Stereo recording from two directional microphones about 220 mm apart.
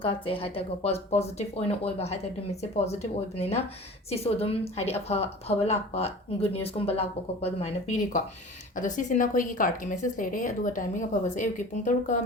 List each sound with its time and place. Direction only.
0.0 s a woman's voice: 25° left (ahead or behind)